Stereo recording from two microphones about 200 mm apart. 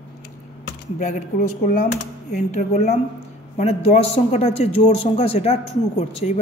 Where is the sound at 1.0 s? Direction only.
40° left (ahead or behind).